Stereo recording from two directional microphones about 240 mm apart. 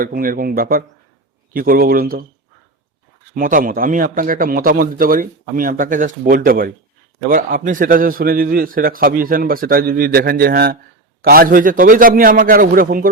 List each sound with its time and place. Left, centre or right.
0.0 s a man's voice: right
3.3 s a man's voice: right